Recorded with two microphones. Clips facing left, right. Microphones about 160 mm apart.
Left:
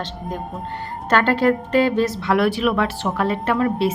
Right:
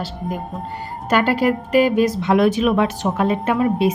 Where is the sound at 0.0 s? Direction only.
10° right (ahead or behind).